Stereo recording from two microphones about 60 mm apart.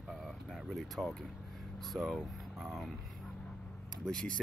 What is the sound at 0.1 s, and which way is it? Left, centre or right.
Vehicle, centre.